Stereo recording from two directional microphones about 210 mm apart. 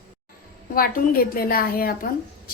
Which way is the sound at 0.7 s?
45° left (ahead or behind).